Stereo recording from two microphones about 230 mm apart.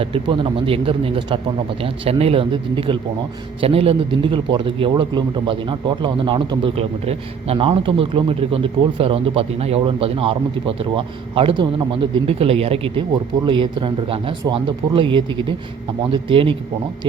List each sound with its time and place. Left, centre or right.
0.0 s a man's voice: right